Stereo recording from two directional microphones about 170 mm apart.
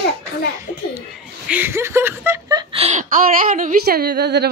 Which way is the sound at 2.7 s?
40° right (ahead or behind).